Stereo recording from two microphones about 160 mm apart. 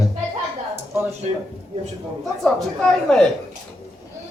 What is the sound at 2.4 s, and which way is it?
Speech, 5° left (ahead or behind).